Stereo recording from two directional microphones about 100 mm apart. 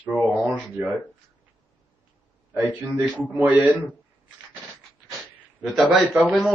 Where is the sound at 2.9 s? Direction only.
10° right (ahead or behind).